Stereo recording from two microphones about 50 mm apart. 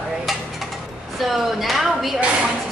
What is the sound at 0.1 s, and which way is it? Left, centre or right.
Dishes, centre.